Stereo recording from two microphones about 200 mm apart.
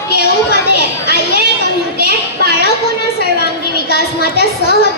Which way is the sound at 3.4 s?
55° left (ahead or behind).